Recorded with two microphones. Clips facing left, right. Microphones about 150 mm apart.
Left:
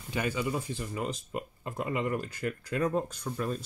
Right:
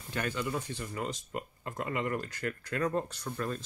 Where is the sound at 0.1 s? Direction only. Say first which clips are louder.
Left 3 dB; 10° left (ahead or behind).